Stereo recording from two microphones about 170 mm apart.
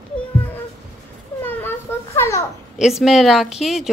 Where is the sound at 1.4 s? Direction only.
15° left (ahead or behind).